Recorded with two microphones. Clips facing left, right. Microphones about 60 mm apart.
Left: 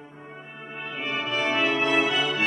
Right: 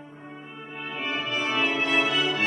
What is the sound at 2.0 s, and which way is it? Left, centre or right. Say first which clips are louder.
Organ: left 1 dB; left.